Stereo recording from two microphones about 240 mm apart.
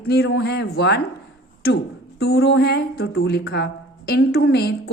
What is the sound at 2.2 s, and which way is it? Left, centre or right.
Speech, left.